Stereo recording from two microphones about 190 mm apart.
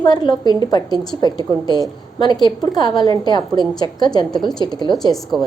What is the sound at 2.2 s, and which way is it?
A woman's voice, 25° left (ahead or behind).